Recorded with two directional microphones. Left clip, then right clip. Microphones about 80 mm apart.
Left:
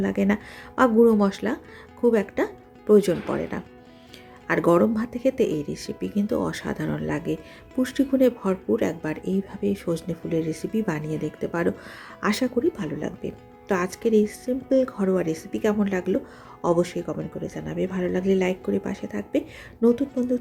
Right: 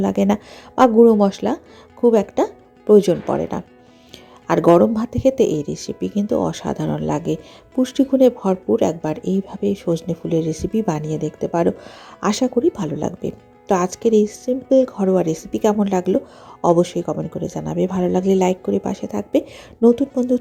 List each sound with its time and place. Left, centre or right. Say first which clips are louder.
0.0 s speech: right 6 dB; right
0.8 s speech: right 6 dB; right
3.3 s speech: right 6 dB; right
7.8 s speech: right 6 dB; right
12.6 s speech: right 6 dB; right
17.4 s speech: right 7 dB; right